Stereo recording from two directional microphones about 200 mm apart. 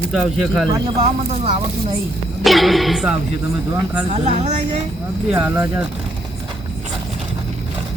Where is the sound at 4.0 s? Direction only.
30° right (ahead or behind).